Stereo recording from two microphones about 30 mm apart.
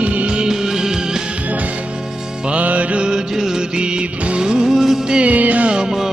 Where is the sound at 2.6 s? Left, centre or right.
Right.